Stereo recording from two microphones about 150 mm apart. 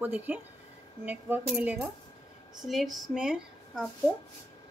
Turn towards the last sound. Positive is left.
turn(degrees=-5)  # may be behind; listen again after turning